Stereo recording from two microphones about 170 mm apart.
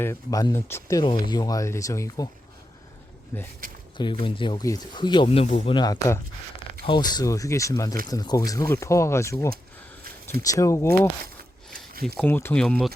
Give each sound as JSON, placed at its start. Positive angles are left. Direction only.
{"t": 0.0, "sound": "speech", "side_deg": 20}
{"t": 3.3, "sound": "speech", "side_deg": 15}
{"t": 3.9, "sound": "speech", "side_deg": 30}